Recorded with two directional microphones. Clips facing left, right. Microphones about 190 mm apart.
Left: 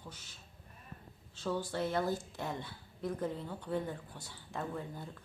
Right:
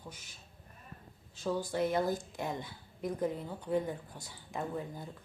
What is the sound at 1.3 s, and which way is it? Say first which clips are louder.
Speech: right 2 dB; 10° right (ahead or behind).